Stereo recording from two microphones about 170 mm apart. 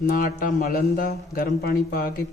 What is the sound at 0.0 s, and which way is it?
A man's voice, 55° left (ahead or behind).